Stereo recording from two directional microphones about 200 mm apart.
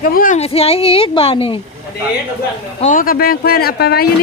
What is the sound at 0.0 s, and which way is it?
A woman's voice, 45° left (ahead or behind).